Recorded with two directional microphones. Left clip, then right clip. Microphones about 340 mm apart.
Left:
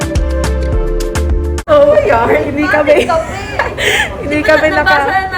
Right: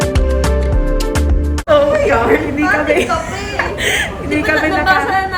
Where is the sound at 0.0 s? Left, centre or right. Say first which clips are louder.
Right 1 dB; centre.